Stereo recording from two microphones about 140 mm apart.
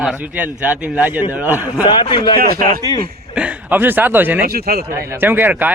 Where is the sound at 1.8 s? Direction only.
35° left (ahead or behind).